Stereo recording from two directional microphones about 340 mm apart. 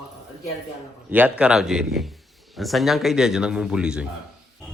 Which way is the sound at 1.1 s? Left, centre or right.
Centre.